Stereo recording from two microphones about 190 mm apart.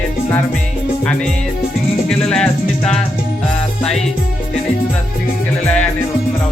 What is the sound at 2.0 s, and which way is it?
Music, 5° left (ahead or behind).